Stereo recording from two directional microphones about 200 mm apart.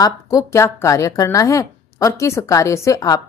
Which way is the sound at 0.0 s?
15° left (ahead or behind).